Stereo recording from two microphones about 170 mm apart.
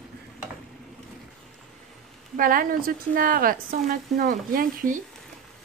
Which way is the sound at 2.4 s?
55° right (ahead or behind).